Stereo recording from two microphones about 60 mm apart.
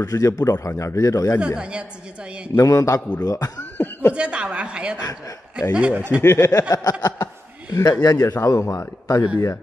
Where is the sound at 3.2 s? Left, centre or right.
Left.